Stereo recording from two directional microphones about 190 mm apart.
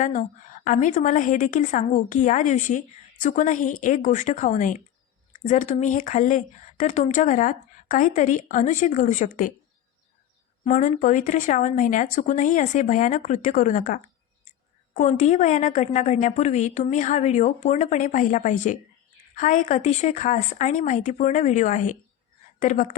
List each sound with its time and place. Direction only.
0.0 s a woman's voice: 40° left (ahead or behind)
10.7 s a woman's voice: 40° left (ahead or behind)